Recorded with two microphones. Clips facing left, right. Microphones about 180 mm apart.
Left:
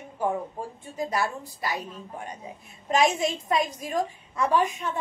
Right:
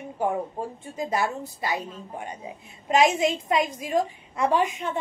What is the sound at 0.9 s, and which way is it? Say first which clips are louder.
Speech: right 1 dB; 20° right (ahead or behind).